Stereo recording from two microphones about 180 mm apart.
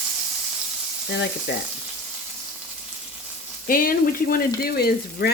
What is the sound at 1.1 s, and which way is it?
Frying, 75° left (ahead or behind).